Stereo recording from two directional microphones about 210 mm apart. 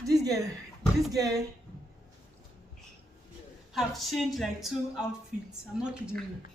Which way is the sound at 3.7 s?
Centre (ahead or behind).